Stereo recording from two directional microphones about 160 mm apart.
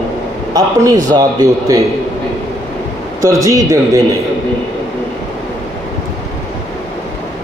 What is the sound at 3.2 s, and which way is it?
Speech, 20° right (ahead or behind).